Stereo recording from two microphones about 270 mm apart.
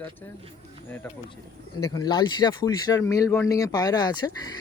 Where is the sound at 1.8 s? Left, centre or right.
Centre.